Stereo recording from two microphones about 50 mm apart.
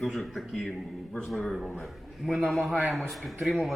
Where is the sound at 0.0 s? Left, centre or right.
Centre.